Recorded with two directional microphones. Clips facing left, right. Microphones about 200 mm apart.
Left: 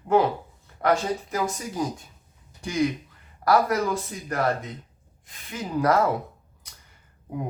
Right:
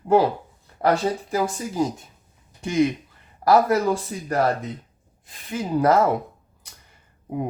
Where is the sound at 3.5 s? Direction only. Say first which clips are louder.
Right 4 dB; 30° right (ahead or behind).